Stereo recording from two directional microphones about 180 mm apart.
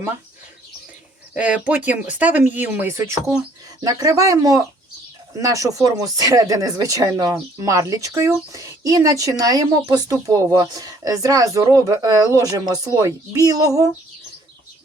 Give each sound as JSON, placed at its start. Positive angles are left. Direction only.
{"t": 1.3, "sound": "speech", "side_deg": -10}